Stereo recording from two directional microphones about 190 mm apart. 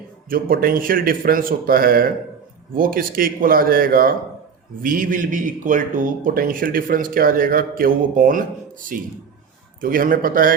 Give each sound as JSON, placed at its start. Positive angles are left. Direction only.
{"t": 0.3, "sound": "speech", "side_deg": -50}